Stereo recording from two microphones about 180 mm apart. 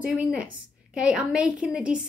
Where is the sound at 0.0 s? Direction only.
5° right (ahead or behind).